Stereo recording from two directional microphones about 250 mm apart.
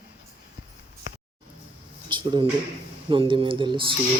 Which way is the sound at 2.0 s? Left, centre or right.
Centre.